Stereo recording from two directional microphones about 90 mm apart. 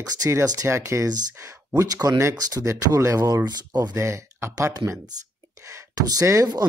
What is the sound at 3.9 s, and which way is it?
Speech, 30° right (ahead or behind).